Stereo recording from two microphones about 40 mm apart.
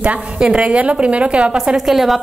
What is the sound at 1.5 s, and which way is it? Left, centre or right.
Speech, centre.